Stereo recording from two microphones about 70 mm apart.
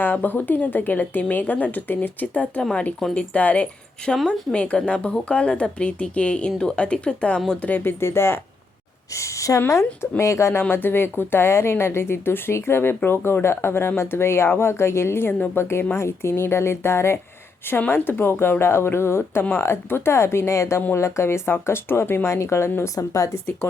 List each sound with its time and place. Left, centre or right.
0.0 s speech: left
7.9 s speech: left
10.6 s speech: left
23.0 s speech: left
23.3 s speech: left